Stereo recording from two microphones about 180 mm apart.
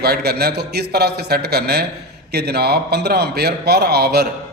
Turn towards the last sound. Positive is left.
turn(degrees=-60)  # may be behind; listen again after turning